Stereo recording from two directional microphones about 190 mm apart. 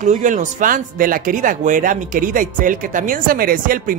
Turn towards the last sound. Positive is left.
turn(degrees=-50)  # may be behind; listen again after turning